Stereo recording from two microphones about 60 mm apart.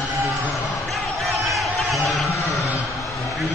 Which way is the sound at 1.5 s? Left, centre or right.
Centre.